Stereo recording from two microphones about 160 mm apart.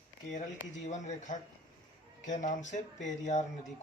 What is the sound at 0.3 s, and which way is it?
Speech, 50° left (ahead or behind).